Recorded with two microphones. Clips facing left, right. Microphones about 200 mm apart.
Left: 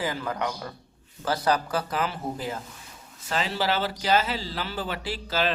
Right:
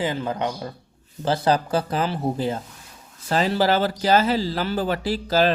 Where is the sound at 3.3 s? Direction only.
40° right (ahead or behind).